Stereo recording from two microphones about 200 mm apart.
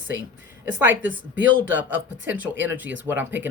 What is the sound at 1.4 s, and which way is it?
Speech, 70° right (ahead or behind).